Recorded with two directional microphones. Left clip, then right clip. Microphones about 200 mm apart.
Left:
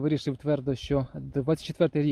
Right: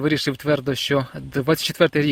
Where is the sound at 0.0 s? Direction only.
5° right (ahead or behind).